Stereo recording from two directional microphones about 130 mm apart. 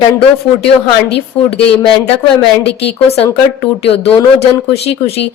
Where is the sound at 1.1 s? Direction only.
50° left (ahead or behind).